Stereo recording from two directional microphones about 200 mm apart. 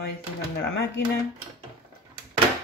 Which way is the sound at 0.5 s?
55° left (ahead or behind).